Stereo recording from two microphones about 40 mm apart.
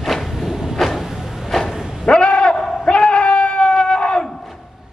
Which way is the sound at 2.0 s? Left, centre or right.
Left.